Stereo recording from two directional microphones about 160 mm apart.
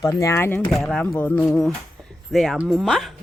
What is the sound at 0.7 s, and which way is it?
Speech, centre (ahead or behind).